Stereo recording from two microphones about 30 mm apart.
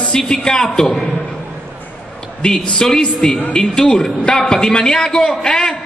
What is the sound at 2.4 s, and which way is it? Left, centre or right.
Speech, left.